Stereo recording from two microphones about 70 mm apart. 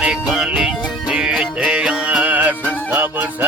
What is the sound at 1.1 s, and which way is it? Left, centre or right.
Music, centre.